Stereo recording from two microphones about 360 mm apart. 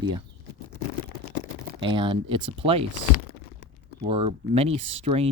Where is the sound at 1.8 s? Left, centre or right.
Centre.